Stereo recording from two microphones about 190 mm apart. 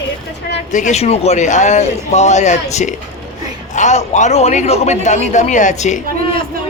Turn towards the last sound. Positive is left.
turn(degrees=35)  # may be behind; listen again after turning